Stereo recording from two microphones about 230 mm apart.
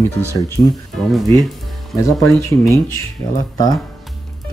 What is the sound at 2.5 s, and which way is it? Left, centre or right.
Speech, centre.